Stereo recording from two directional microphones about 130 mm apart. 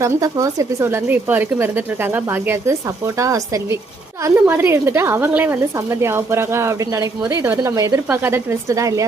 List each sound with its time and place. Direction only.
0.0 s a woman's voice: 25° right (ahead or behind)